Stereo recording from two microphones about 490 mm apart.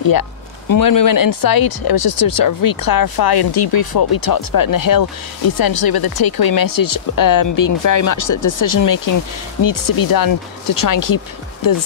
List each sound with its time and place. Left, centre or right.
0.0 s speech: left